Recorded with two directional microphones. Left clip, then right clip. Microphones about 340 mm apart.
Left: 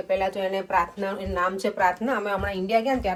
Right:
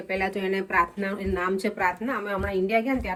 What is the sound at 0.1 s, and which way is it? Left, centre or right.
Speech, left.